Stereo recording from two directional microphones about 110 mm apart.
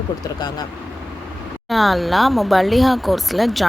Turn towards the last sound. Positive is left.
turn(degrees=0)  # may be behind; listen again after turning